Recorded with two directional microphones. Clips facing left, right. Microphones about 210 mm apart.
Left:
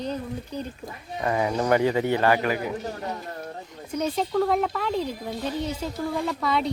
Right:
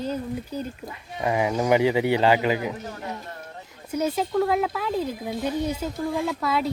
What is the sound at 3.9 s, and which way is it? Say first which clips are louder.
Speech: right 1 dB; 5° right (ahead or behind).